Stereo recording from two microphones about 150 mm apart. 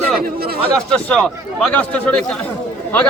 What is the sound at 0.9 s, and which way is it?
A man's voice, 5° left (ahead or behind).